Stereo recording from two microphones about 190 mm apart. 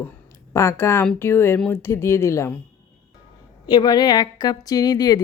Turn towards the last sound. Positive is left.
turn(degrees=20)  # may be behind; listen again after turning